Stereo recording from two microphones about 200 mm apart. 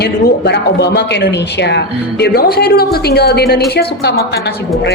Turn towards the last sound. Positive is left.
turn(degrees=55)  # may be behind; listen again after turning